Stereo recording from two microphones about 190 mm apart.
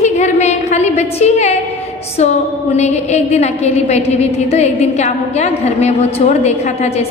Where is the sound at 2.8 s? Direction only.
35° left (ahead or behind).